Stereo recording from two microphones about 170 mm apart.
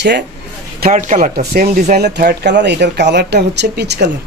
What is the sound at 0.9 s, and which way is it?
Speech, 45° right (ahead or behind).